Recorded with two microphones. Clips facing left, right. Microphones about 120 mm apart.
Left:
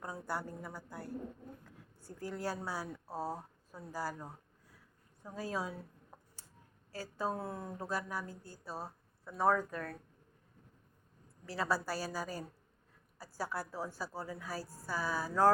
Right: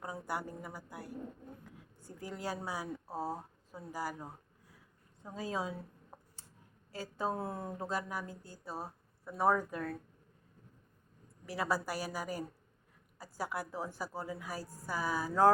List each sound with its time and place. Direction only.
0.0 s a woman's voice: 15° right (ahead or behind)
6.9 s a woman's voice: 20° right (ahead or behind)
11.4 s a woman's voice: 15° right (ahead or behind)